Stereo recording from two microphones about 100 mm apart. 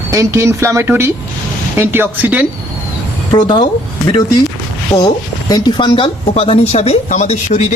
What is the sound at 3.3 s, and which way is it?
Speech, 50° left (ahead or behind).